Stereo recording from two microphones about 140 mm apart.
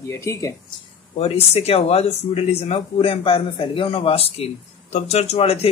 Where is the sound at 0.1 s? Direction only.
20° left (ahead or behind).